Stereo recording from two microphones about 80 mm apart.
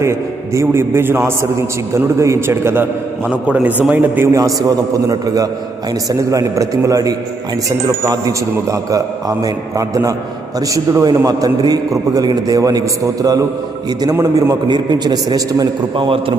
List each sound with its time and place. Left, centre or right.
0.0 s a man's voice: right
3.2 s a man's voice: centre
4.3 s a man's voice: right
14.2 s a man's voice: right
14.7 s a man's voice: right